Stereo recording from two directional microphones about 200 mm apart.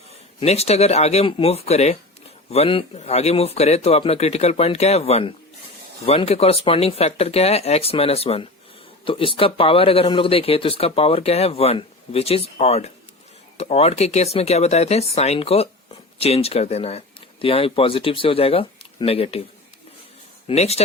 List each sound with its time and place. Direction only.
0.3 s speech: 30° left (ahead or behind)
20.5 s speech: 30° left (ahead or behind)